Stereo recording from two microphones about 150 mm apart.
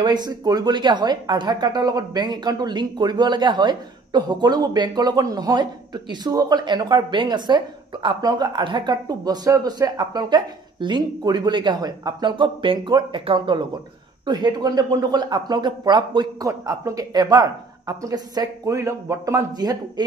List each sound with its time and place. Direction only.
0.0 s a woman's voice: 30° right (ahead or behind)